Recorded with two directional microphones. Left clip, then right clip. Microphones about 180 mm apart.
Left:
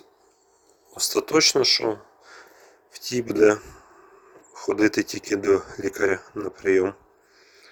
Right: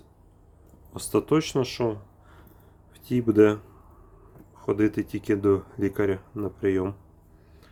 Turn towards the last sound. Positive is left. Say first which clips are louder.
# left 5 dB
turn(degrees=20)  # may be behind; listen again after turning